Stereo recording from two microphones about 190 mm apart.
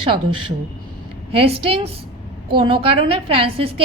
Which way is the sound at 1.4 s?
30° right (ahead or behind).